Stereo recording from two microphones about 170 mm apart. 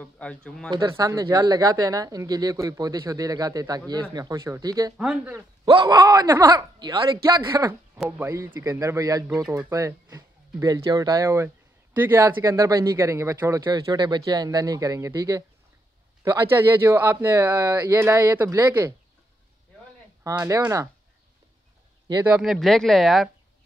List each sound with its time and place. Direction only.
0.0 s speech: 5° left (ahead or behind)
0.7 s speech: 25° right (ahead or behind)
4.9 s speech: 5° right (ahead or behind)
5.7 s speech: 25° right (ahead or behind)
7.9 s speech: 10° right (ahead or behind)
20.2 s speech: 20° right (ahead or behind)
22.2 s speech: 5° right (ahead or behind)